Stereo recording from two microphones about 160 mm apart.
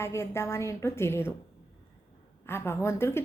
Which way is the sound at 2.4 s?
15° left (ahead or behind).